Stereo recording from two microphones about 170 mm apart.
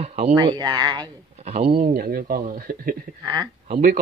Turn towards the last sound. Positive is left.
turn(degrees=-50)  # may be behind; listen again after turning